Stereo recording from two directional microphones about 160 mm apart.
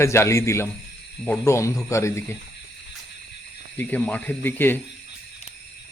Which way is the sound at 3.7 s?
10° left (ahead or behind).